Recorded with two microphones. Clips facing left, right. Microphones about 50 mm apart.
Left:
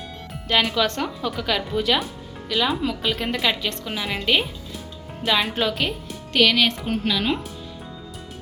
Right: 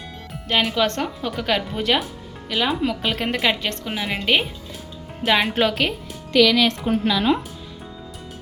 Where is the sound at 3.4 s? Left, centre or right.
Right.